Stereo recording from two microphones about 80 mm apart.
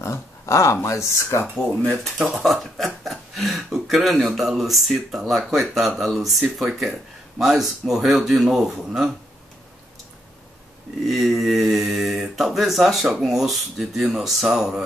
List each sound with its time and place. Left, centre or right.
0.0 s speech: left
1.4 s speech: centre
2.0 s speech: centre
11.1 s speech: centre